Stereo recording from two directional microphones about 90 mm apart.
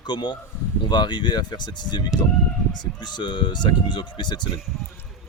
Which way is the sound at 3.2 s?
55° left (ahead or behind).